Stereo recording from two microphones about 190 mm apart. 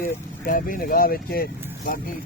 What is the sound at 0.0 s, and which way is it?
Speech, 45° left (ahead or behind).